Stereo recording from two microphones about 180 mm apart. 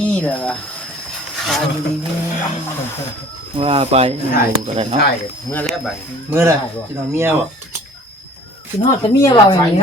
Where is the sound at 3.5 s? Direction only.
30° right (ahead or behind).